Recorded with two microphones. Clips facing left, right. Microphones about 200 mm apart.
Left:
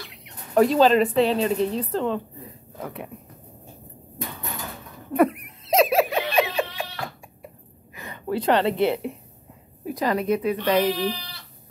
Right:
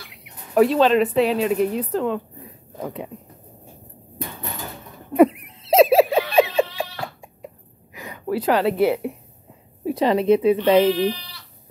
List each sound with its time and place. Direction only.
0.1 s a woman's voice: 5° right (ahead or behind)
2.8 s speech: 15° right (ahead or behind)
5.1 s laughter: 25° right (ahead or behind)
7.4 s a sound: 10° right (ahead or behind)
9.8 s speech: 25° right (ahead or behind)